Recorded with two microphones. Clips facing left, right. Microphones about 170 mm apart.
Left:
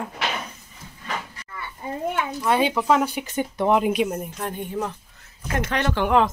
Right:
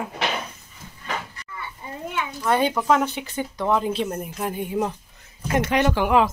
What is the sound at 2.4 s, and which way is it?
Speech, 5° left (ahead or behind).